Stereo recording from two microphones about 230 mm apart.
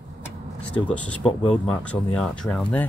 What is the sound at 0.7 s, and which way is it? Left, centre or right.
Speech, centre.